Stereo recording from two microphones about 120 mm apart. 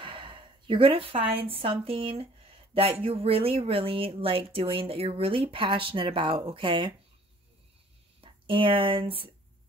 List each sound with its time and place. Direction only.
0.0 s a sound: 45° right (ahead or behind)
1.5 s speech: 50° right (ahead or behind)
8.2 s speech: 45° right (ahead or behind)